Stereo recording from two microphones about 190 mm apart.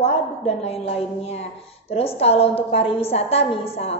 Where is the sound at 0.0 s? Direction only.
30° left (ahead or behind).